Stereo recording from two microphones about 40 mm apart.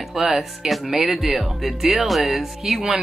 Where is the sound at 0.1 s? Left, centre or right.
Centre.